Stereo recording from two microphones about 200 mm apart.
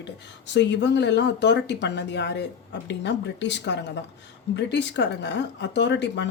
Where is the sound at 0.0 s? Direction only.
60° left (ahead or behind).